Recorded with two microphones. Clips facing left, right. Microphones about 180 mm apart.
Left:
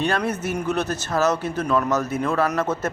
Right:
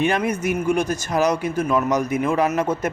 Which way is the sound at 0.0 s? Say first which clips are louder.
Right 3 dB; 15° right (ahead or behind).